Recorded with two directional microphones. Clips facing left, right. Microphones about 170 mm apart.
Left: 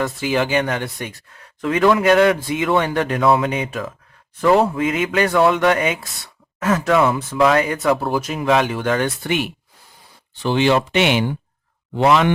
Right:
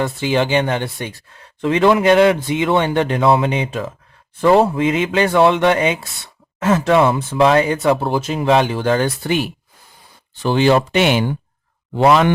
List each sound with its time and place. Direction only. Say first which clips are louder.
0.0 s speech: right 2 dB; 30° right (ahead or behind)